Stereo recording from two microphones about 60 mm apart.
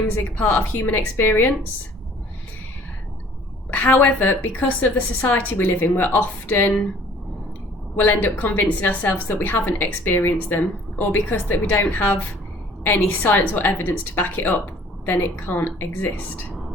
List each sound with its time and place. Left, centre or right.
0.2 s a woman's voice: left
3.7 s a woman's voice: left
7.9 s a woman's voice: left